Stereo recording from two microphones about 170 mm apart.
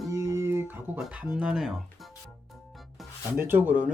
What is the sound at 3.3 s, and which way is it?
Speech, 10° right (ahead or behind).